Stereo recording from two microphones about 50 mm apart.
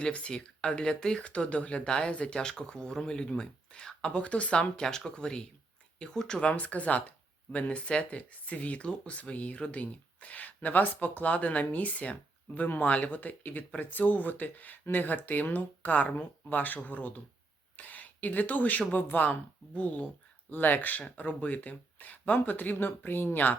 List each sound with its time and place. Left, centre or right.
0.0 s speech: centre
1.3 s speech: left
4.8 s speech: centre
6.5 s speech: left